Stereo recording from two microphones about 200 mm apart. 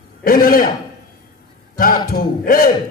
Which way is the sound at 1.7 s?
45° left (ahead or behind).